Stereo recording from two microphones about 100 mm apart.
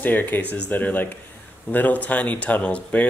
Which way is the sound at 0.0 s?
20° left (ahead or behind).